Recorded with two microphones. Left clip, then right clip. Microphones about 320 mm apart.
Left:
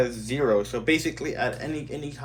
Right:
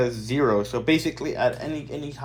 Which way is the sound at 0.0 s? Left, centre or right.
Centre.